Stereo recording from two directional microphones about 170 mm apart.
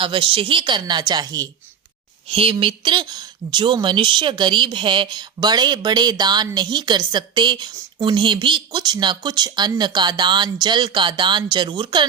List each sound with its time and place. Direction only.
0.0 s speech: 30° right (ahead or behind)
2.2 s speech: 35° right (ahead or behind)